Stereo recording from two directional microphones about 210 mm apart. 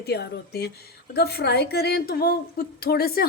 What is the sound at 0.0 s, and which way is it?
A woman's voice, 50° left (ahead or behind).